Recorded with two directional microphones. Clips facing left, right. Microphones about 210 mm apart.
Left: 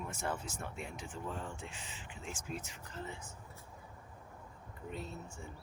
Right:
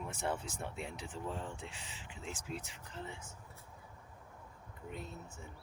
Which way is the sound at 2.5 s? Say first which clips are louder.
Left 1 dB; 15° left (ahead or behind).